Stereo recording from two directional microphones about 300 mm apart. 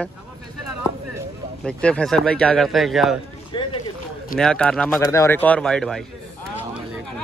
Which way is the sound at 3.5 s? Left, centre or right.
Centre.